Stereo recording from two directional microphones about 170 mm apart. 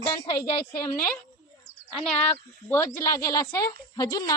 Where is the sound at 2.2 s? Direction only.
10° left (ahead or behind).